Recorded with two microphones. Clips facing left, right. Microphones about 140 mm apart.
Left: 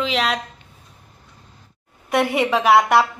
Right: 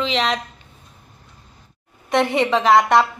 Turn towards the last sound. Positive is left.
turn(degrees=5)  # may be behind; listen again after turning